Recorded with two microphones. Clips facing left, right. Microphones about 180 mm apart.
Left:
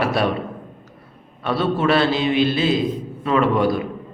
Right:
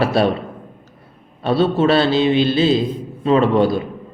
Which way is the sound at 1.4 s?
30° right (ahead or behind).